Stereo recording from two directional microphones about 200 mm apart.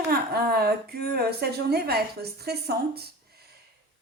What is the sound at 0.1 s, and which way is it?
A woman's voice, 50° right (ahead or behind).